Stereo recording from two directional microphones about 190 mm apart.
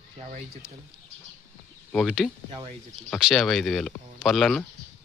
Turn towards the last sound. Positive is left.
turn(degrees=0)  # may be behind; listen again after turning